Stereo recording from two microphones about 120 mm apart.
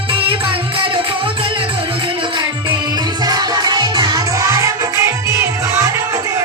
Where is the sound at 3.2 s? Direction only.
35° right (ahead or behind).